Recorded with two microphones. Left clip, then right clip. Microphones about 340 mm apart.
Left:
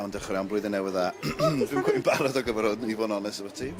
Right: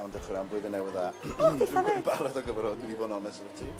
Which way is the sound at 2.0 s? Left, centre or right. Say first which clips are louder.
Left 6 dB; left.